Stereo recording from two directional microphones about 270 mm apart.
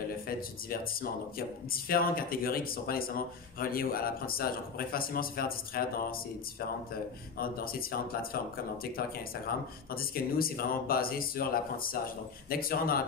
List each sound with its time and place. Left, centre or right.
1.7 s speech: left
7.3 s speech: left
9.9 s speech: left